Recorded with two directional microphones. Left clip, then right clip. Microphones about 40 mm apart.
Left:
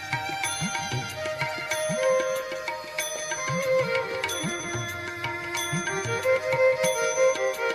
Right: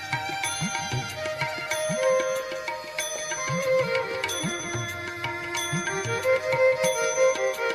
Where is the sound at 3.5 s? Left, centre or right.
Right.